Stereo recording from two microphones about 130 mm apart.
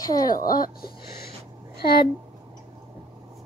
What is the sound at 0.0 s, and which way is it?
Speech, 30° left (ahead or behind).